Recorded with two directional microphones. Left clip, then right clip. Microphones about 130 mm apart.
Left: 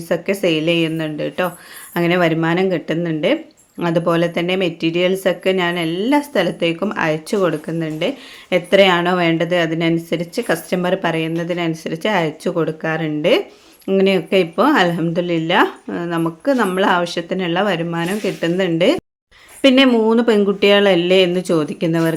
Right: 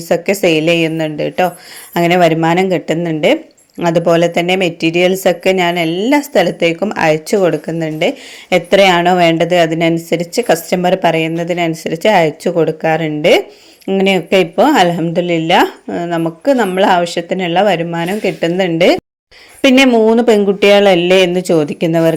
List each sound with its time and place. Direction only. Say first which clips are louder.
0.1 s speech: right 6 dB; 25° right (ahead or behind)